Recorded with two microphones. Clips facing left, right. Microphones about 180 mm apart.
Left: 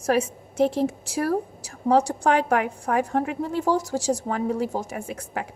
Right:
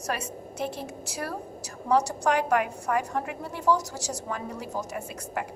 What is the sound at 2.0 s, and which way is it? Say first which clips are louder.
A woman's voice: left 3 dB; 55° left (ahead or behind).